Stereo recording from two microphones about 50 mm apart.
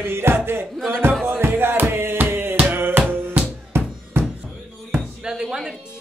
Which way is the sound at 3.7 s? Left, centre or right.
Right.